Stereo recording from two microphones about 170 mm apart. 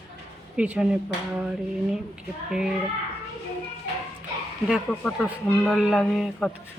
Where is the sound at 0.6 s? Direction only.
5° right (ahead or behind).